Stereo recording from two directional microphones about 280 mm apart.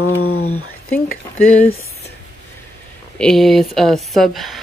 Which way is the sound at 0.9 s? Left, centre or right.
Centre.